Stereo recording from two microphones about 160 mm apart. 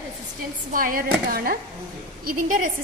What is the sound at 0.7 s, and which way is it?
A woman's voice, 60° right (ahead or behind).